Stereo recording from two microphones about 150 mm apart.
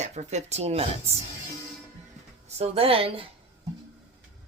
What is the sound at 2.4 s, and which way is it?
Speech, 45° right (ahead or behind).